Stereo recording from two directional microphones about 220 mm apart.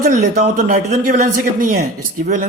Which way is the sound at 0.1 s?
35° right (ahead or behind).